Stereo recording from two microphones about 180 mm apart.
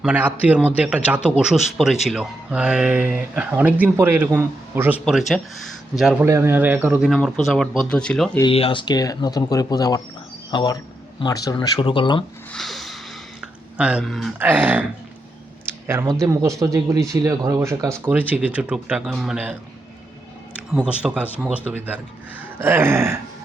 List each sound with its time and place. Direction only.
0.0 s speech: 10° right (ahead or behind)
6.2 s speech: 15° right (ahead or behind)
7.1 s speech: centre (ahead or behind)
8.4 s speech: 30° left (ahead or behind)
12.5 s a sound: centre (ahead or behind)
13.7 s speech: 5° right (ahead or behind)
14.3 s speech: 10° right (ahead or behind)
15.9 s speech: 15° right (ahead or behind)
20.7 s speech: 5° right (ahead or behind)